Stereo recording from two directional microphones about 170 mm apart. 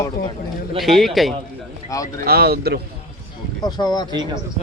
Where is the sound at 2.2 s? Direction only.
65° right (ahead or behind).